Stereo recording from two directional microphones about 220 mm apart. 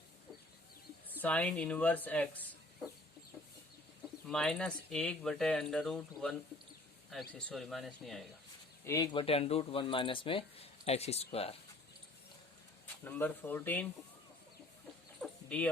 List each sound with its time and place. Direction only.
1.2 s speech: 5° left (ahead or behind)
4.3 s speech: centre (ahead or behind)
8.8 s speech: 15° left (ahead or behind)
9.2 s speech: 25° left (ahead or behind)
13.1 s speech: 10° left (ahead or behind)
15.2 s a sound: 5° left (ahead or behind)